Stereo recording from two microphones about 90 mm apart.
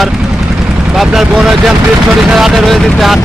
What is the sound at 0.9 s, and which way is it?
Speech, 5° right (ahead or behind).